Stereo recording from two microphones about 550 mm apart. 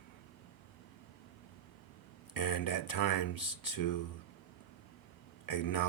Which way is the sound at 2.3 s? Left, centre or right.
Left.